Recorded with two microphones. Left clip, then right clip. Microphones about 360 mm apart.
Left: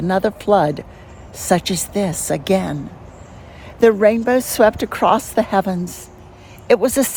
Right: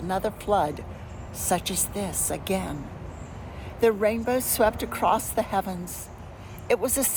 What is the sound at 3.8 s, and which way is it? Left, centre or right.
A woman's voice, left.